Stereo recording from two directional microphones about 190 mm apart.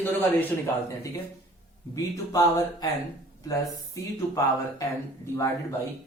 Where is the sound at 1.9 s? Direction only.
20° left (ahead or behind).